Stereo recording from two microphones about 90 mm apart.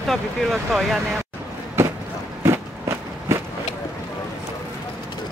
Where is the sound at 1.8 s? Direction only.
30° right (ahead or behind).